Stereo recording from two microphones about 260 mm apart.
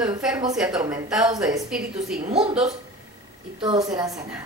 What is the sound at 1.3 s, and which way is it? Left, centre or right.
Speech, centre.